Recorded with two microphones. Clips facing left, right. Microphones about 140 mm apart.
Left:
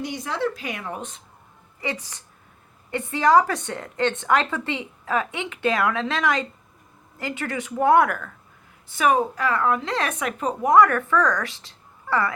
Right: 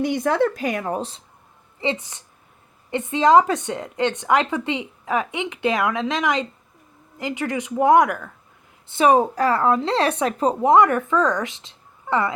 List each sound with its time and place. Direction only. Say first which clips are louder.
0.0 s a woman's voice: right 7 dB; 55° right (ahead or behind); by 8.3 s 15° right (ahead or behind)
8.9 s a woman's voice: right 4 dB; 30° right (ahead or behind)